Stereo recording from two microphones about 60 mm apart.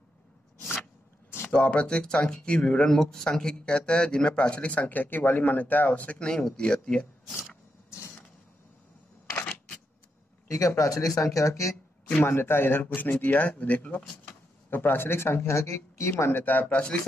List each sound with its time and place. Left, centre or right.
1.5 s speech: centre
9.3 s camera: left
10.8 s speech: left
12.3 s speech: left
14.2 s speech: left
16.4 s speech: left